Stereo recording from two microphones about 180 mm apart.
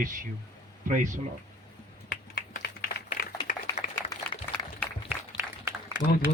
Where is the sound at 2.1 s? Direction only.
55° left (ahead or behind).